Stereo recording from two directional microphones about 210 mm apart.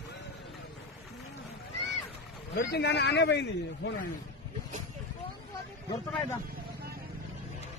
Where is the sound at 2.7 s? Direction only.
55° left (ahead or behind).